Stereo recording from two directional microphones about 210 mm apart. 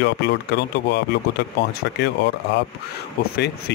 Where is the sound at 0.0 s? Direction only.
50° left (ahead or behind).